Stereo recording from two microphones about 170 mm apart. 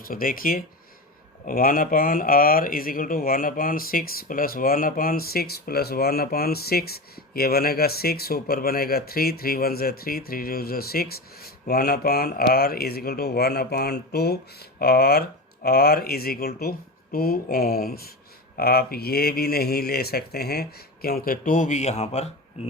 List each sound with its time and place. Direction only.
0.0 s speech: 55° left (ahead or behind); by 22.3 s 40° left (ahead or behind)